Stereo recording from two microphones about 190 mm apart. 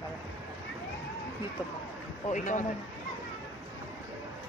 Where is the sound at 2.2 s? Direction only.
40° left (ahead or behind).